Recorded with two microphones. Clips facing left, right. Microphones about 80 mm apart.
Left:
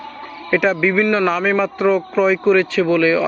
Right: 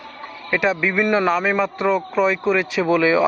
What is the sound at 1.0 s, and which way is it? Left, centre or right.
Speech, centre.